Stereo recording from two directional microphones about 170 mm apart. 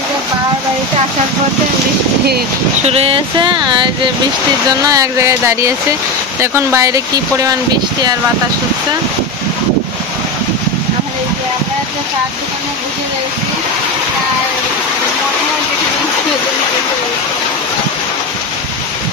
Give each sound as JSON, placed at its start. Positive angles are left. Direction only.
{"t": 2.9, "sound": "speech", "side_deg": -35}